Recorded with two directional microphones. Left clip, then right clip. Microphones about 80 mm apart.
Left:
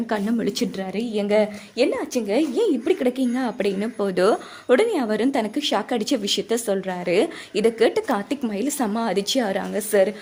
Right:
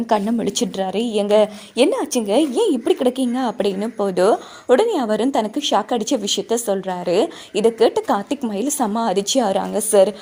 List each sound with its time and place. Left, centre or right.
0.1 s a woman's voice: right
2.6 s a woman's voice: right
3.8 s a woman's voice: centre; by 9.4 s right
9.4 s a woman's voice: right